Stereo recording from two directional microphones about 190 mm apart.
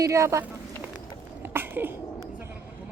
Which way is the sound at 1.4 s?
10° right (ahead or behind).